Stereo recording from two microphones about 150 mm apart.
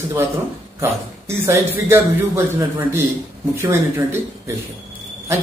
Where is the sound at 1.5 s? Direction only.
15° right (ahead or behind).